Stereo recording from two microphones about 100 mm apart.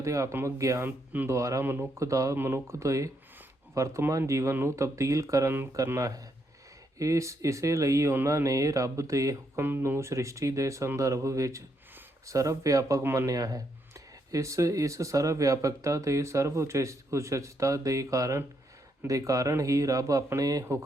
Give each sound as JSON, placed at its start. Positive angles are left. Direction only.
{"t": 0.0, "sound": "speech", "side_deg": -30}
{"t": 0.9, "sound": "speech", "side_deg": -15}
{"t": 1.3, "sound": "speech", "side_deg": -30}